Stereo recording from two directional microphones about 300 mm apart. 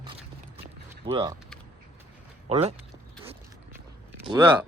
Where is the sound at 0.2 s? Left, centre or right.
Centre.